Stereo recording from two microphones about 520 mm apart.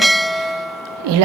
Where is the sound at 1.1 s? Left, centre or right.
Right.